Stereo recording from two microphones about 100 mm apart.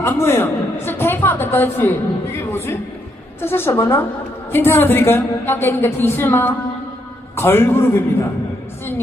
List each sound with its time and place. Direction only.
0.0 s a woman's voice: 25° left (ahead or behind)